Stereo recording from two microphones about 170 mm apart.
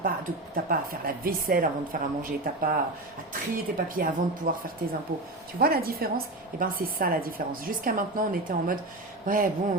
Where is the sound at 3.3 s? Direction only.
55° right (ahead or behind).